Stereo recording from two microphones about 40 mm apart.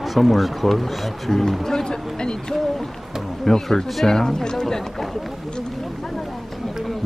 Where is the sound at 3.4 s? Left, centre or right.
Centre.